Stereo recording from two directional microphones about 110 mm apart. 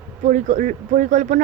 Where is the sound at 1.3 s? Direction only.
90° right.